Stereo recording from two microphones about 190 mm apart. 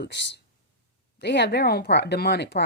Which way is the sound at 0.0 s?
65° left (ahead or behind).